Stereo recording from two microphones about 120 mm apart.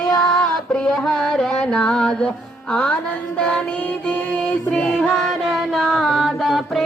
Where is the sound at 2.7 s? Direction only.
10° left (ahead or behind).